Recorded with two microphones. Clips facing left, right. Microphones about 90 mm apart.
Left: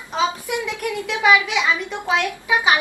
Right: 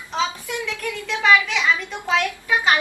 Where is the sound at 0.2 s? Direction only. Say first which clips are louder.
Left 3 dB; 15° left (ahead or behind).